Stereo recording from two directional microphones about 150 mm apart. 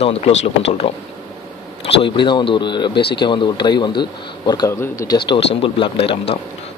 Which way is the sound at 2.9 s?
90° left.